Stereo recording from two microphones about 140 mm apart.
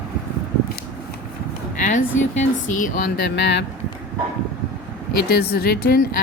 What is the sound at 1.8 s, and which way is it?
A woman's voice, 65° left (ahead or behind).